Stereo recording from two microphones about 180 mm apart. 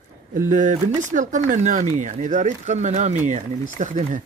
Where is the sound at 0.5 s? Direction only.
45° right (ahead or behind).